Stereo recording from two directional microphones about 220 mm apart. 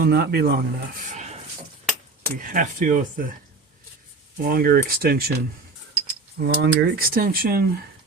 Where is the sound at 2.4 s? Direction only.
40° right (ahead or behind).